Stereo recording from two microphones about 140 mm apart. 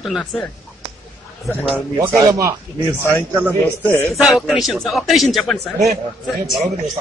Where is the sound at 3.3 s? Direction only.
10° right (ahead or behind).